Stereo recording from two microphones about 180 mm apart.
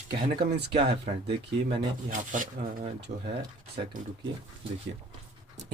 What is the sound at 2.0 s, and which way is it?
Speech, 50° right (ahead or behind).